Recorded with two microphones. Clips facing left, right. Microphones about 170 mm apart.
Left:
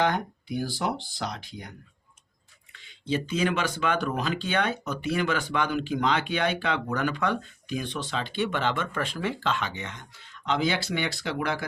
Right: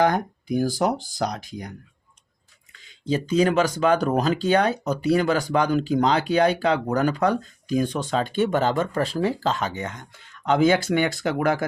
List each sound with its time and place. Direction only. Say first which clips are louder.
0.0 s speech: right 5 dB; 45° right (ahead or behind)
2.7 s speech: right 4 dB; 40° right (ahead or behind)